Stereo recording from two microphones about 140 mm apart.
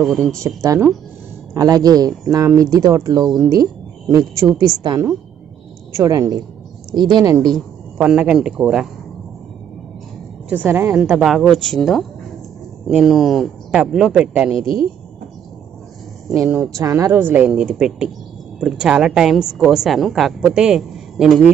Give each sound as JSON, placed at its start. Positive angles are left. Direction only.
{"t": 0.0, "sound": "a woman's voice", "side_deg": 0}
{"t": 0.4, "sound": "speech", "side_deg": -25}
{"t": 7.4, "sound": "speech", "side_deg": 0}
{"t": 10.5, "sound": "a woman's voice", "side_deg": -15}
{"t": 16.3, "sound": "a woman's voice", "side_deg": -5}
{"t": 16.7, "sound": "speech", "side_deg": -25}
{"t": 17.3, "sound": "a woman's voice", "side_deg": -10}